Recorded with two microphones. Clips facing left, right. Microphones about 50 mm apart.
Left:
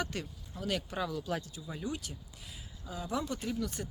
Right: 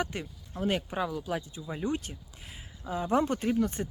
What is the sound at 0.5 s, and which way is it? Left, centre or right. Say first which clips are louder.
Speech: right 6 dB; right.